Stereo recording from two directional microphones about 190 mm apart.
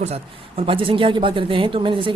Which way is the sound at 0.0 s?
35° right (ahead or behind).